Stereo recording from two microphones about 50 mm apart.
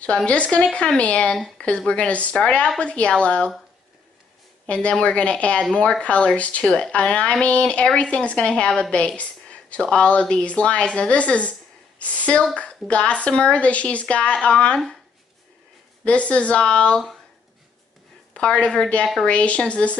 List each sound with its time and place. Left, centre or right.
0.0 s a woman's voice: left
4.6 s a woman's voice: left
6.6 s a woman's voice: centre
8.9 s a sound: left
9.8 s a woman's voice: centre
16.0 s a woman's voice: left
18.3 s a woman's voice: left